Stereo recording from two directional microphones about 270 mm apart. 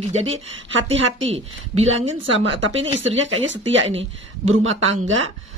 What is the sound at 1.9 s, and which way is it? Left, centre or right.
Speech, right.